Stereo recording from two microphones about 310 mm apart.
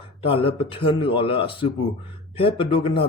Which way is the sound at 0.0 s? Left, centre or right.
Centre.